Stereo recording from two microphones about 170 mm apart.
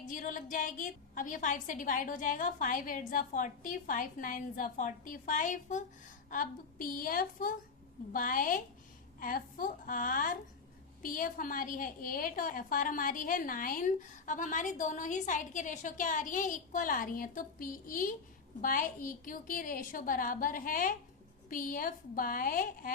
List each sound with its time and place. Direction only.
0.0 s a woman's voice: 50° left (ahead or behind)